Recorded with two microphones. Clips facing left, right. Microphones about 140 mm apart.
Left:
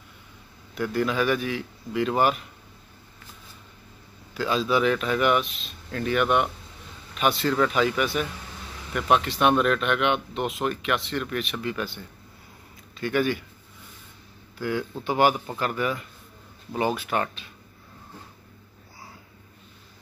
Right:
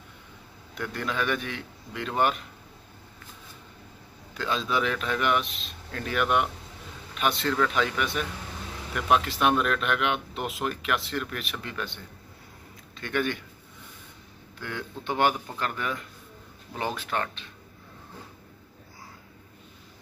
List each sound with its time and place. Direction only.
0.7 s speech: 5° left (ahead or behind)
4.3 s speech: 5° left (ahead or behind)
13.0 s speech: 5° left (ahead or behind)
14.6 s speech: 5° left (ahead or behind)